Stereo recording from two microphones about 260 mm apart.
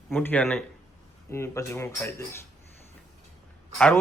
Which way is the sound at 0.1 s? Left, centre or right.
Centre.